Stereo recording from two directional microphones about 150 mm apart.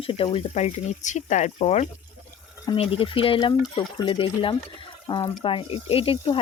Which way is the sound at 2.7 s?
40° left (ahead or behind).